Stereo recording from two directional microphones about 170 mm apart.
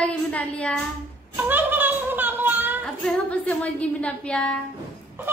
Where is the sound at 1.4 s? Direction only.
10° right (ahead or behind).